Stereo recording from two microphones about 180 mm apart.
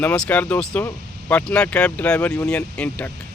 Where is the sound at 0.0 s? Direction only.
5° left (ahead or behind).